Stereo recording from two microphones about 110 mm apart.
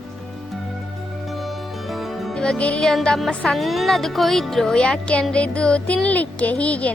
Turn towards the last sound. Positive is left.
turn(degrees=10)  # may be behind; listen again after turning